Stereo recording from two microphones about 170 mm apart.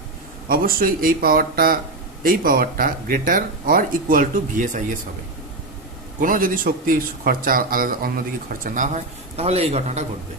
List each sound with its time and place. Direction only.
0.4 s speech: 55° right (ahead or behind)
6.2 s a man's voice: 55° right (ahead or behind)